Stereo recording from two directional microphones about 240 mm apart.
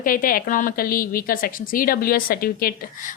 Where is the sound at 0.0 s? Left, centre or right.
Left.